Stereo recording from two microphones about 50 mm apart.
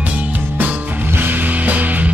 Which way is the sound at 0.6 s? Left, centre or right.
Right.